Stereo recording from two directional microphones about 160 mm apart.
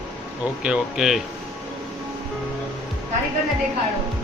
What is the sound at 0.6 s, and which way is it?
Speech, 5° right (ahead or behind).